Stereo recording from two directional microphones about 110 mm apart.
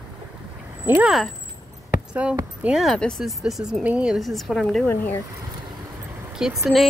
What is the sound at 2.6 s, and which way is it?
Speech, 5° right (ahead or behind).